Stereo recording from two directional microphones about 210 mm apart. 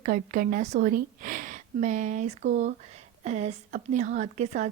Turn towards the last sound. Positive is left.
turn(degrees=-35)  # may be behind; listen again after turning